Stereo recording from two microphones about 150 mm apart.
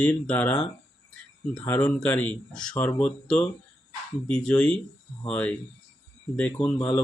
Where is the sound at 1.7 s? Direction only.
10° left (ahead or behind).